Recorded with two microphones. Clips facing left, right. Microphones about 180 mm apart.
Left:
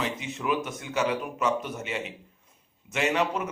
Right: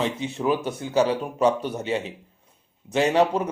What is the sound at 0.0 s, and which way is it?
A man's voice, 30° right (ahead or behind).